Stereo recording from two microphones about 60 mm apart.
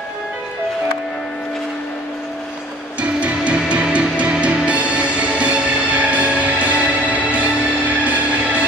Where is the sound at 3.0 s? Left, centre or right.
Right.